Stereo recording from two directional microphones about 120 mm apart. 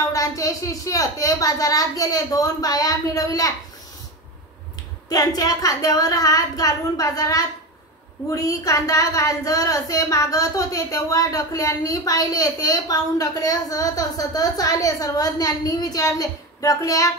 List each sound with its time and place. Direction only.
0.1 s a woman's voice: 30° left (ahead or behind)
5.1 s a woman's voice: 30° left (ahead or behind)